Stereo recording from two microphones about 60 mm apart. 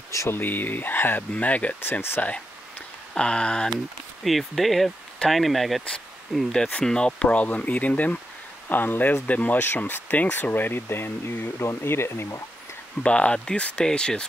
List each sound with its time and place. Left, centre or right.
0.3 s speech: left
1.3 s speech: left
1.8 s speech: left
3.2 s speech: centre
4.2 s speech: centre
6.5 s speech: centre; by 12.3 s left
13.0 s speech: centre